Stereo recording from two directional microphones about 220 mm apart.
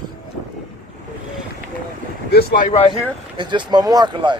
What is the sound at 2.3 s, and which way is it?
Speech, 40° left (ahead or behind).